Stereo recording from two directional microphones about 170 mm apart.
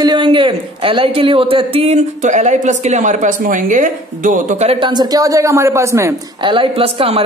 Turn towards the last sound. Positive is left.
turn(degrees=-35)  # may be behind; listen again after turning